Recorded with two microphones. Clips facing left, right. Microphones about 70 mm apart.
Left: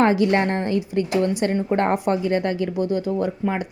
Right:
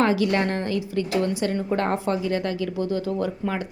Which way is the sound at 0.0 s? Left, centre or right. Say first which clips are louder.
Left 3 dB; left.